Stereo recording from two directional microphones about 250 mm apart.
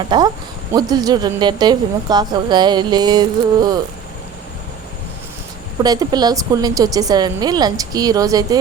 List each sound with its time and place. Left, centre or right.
0.1 s speech: centre
5.8 s speech: centre